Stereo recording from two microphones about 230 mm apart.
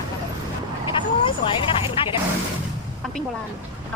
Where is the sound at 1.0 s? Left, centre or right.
Left.